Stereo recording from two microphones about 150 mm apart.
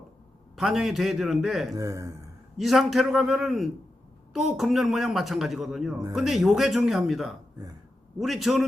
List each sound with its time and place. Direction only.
0.5 s speech: centre (ahead or behind)
1.7 s speech: 20° right (ahead or behind)
2.6 s speech: centre (ahead or behind)